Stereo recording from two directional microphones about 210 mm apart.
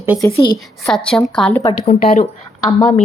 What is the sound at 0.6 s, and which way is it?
A woman's voice, 5° left (ahead or behind).